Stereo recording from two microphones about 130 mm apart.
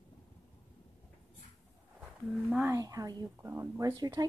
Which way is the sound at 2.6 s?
25° right (ahead or behind).